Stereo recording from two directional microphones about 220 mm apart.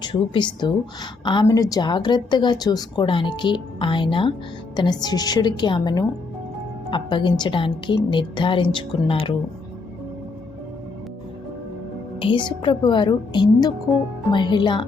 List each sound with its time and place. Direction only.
0.0 s a woman's voice: 20° left (ahead or behind)
12.2 s a woman's voice: 20° left (ahead or behind)